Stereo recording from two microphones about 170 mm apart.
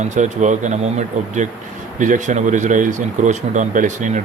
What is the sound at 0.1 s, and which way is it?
Speech, 45° right (ahead or behind).